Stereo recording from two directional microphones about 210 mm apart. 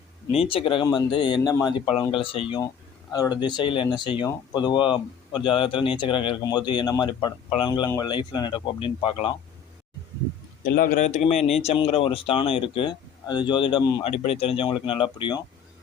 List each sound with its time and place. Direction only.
0.3 s speech: 25° left (ahead or behind)
10.6 s a man's voice: 45° left (ahead or behind)
11.0 s speech: 30° left (ahead or behind)